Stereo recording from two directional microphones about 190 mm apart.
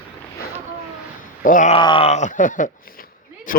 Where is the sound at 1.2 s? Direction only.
45° left (ahead or behind).